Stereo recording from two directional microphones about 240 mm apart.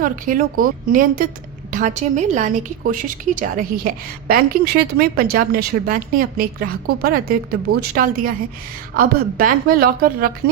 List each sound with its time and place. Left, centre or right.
0.0 s a woman's voice: right